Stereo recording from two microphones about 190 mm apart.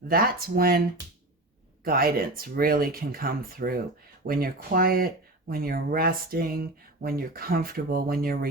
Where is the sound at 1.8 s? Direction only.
50° right (ahead or behind).